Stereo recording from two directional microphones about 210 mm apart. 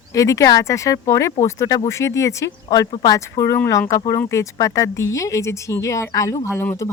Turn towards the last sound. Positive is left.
turn(degrees=10)  # may be behind; listen again after turning